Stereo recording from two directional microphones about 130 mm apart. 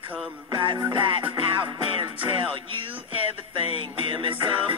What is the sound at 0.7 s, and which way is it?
Music, 40° right (ahead or behind).